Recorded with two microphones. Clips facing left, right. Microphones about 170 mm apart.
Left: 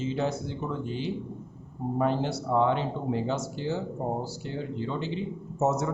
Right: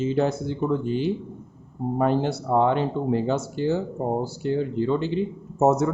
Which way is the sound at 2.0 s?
55° right (ahead or behind).